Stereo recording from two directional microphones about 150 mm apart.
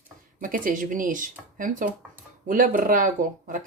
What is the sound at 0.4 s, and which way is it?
Speech, 65° right (ahead or behind).